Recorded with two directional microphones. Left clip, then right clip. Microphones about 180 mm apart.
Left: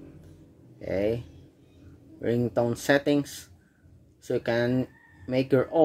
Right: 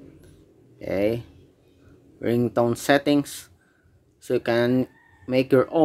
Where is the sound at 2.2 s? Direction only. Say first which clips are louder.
Right 4 dB; 25° right (ahead or behind).